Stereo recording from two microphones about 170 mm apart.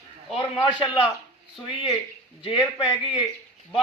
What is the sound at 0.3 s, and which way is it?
Speech, 25° left (ahead or behind).